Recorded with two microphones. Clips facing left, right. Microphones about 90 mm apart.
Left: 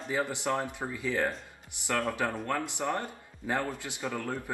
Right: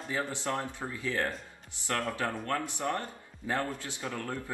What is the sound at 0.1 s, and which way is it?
A man's voice, 15° left (ahead or behind).